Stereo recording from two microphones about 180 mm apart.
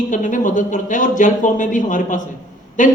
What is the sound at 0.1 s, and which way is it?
A woman's voice, 45° left (ahead or behind).